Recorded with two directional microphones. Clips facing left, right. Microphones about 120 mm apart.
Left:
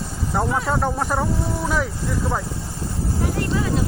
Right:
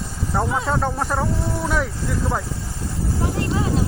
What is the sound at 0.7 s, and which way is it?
Speech, 5° left (ahead or behind).